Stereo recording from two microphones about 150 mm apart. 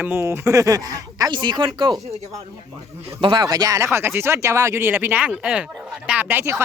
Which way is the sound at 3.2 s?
35° right (ahead or behind).